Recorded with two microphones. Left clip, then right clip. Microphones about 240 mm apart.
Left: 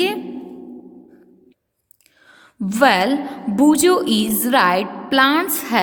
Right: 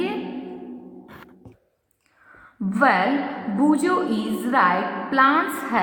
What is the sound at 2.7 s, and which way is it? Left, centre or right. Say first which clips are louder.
Speech: left 4 dB; left.